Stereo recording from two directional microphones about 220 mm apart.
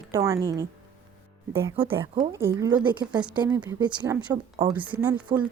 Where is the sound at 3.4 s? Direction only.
20° right (ahead or behind).